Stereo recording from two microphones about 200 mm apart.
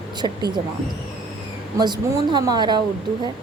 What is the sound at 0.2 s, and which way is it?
Speech, 20° right (ahead or behind).